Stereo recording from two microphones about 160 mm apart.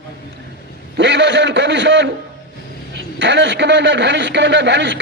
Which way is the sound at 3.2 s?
90° right.